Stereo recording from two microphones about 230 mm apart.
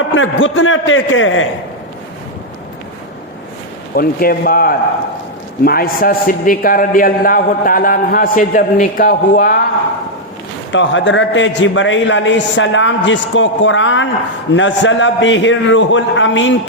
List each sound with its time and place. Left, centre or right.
0.1 s a man's voice: left
3.9 s a man's voice: left
10.7 s a man's voice: left